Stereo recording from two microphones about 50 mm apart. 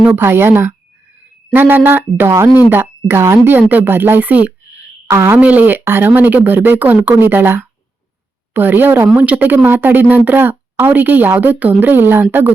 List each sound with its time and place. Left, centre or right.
0.2 s speech: right
1.5 s speech: right
5.0 s a woman's voice: right
5.4 s a woman's voice: right
5.8 s a woman's voice: right
9.1 s a woman's voice: right
9.6 s a woman's voice: right